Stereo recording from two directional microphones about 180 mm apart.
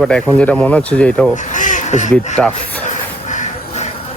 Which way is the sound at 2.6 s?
40° left (ahead or behind).